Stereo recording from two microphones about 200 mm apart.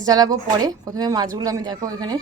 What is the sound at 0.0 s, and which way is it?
Speech, 20° right (ahead or behind).